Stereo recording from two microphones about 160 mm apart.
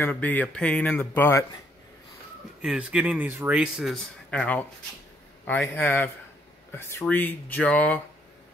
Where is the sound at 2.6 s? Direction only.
5° right (ahead or behind).